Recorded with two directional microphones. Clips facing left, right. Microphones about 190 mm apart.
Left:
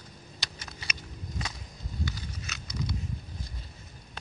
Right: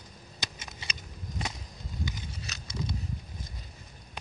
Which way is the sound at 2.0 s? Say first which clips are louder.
Left 1 dB; 20° right (ahead or behind).